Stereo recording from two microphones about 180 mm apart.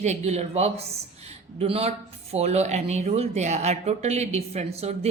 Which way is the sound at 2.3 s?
35° right (ahead or behind).